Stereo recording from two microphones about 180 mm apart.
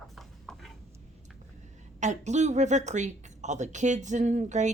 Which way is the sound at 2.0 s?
40° right (ahead or behind).